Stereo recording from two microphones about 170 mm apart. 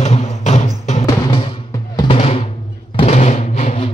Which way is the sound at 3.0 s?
40° left (ahead or behind).